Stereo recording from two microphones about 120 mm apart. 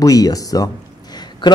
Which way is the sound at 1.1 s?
35° left (ahead or behind).